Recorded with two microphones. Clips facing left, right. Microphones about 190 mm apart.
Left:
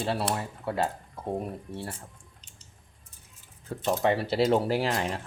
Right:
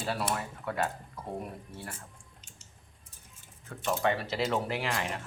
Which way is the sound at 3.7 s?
30° left (ahead or behind).